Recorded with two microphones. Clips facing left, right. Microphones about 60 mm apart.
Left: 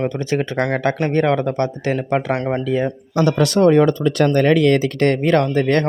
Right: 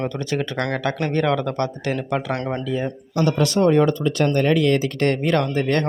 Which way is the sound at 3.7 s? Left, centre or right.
Left.